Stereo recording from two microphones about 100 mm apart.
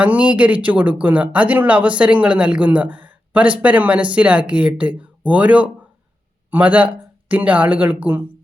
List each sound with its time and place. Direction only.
0.0 s speech: 15° right (ahead or behind)